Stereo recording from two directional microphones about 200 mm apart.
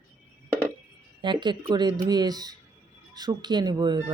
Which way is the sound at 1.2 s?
25° right (ahead or behind).